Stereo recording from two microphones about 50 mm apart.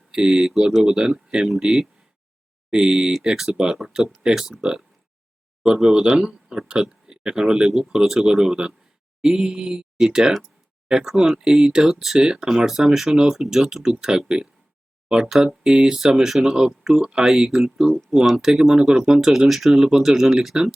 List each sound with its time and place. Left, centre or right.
0.1 s speech: centre
3.2 s speech: centre